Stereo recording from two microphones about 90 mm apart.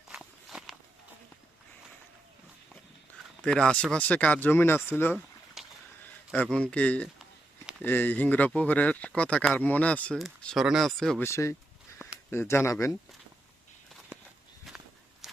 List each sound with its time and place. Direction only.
0.1 s walk: 5° right (ahead or behind)
3.4 s speech: 5° left (ahead or behind); by 5.1 s 25° left (ahead or behind)
5.6 s a sound: 5° right (ahead or behind)
6.3 s speech: 15° left (ahead or behind)
10.5 s speech: centre (ahead or behind)
11.2 s speech: 30° left (ahead or behind)
14.7 s walk: centre (ahead or behind)
15.2 s vehicle: 5° right (ahead or behind)